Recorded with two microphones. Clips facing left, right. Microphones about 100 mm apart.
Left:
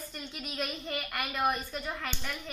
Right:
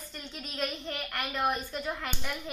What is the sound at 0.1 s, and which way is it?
A woman's voice, 5° left (ahead or behind).